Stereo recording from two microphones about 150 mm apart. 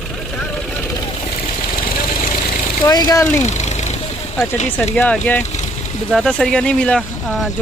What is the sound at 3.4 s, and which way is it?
Vehicle, 50° left (ahead or behind).